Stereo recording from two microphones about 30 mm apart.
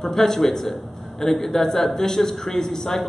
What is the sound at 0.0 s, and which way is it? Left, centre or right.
A man's voice, centre.